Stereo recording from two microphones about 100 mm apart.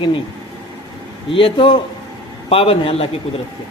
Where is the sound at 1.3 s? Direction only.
65° left (ahead or behind).